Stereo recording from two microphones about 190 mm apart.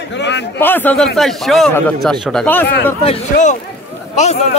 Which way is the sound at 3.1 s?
40° left (ahead or behind).